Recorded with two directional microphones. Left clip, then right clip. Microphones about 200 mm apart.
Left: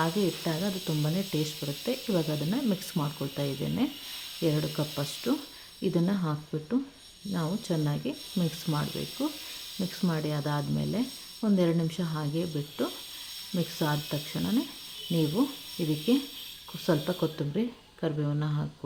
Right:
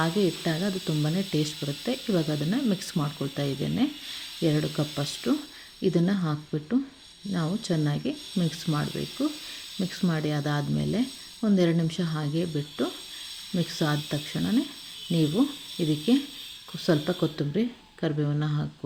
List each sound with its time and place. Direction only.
0.0 s sizzle: 15° right (ahead or behind)
15.8 s sizzle: 10° right (ahead or behind)